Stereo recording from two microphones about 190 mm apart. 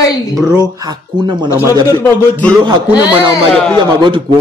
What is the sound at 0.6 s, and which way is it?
Speech, 20° right (ahead or behind).